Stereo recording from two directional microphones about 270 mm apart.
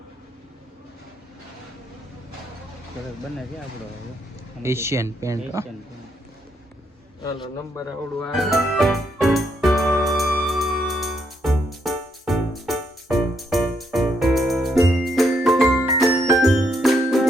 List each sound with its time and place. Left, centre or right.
4.6 s speech: centre
7.3 s a man's voice: centre
8.2 s music: centre